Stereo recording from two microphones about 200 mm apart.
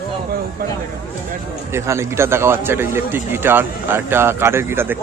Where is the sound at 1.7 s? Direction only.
15° right (ahead or behind).